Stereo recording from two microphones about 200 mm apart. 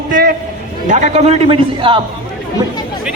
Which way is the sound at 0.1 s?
50° right (ahead or behind).